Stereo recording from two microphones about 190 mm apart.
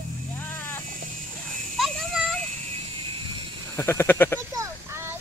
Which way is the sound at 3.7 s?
15° left (ahead or behind).